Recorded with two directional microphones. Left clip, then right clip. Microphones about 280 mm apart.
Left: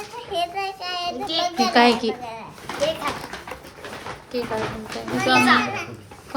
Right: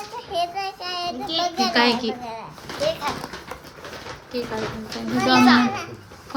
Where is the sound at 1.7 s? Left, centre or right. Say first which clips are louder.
Left 4 dB; centre.